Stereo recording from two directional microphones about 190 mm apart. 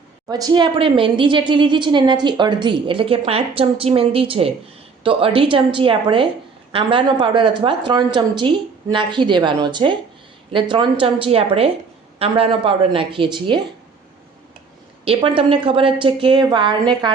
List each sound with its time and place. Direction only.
0.3 s a woman's voice: 20° right (ahead or behind)
15.0 s a woman's voice: 30° right (ahead or behind)